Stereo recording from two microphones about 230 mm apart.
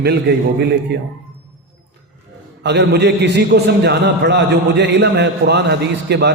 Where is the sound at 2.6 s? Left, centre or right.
Right.